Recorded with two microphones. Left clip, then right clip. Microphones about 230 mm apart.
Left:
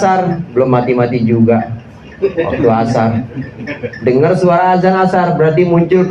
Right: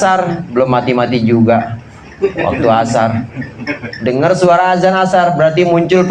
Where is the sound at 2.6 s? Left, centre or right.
Right.